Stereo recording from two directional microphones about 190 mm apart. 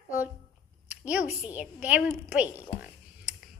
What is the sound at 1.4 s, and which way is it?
A woman's voice, 5° right (ahead or behind).